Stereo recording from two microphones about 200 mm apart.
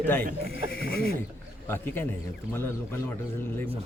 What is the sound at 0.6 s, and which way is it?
Speech, 50° left (ahead or behind).